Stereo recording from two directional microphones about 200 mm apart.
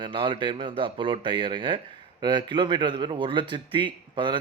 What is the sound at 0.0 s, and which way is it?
Speech, 25° right (ahead or behind).